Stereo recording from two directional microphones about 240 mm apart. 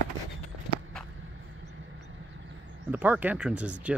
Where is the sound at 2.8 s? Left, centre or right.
Centre.